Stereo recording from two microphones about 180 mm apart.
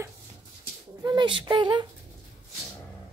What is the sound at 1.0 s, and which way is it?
Speech, 25° right (ahead or behind).